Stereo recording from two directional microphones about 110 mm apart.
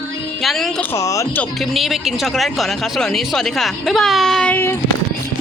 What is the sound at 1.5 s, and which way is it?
Speech, centre (ahead or behind).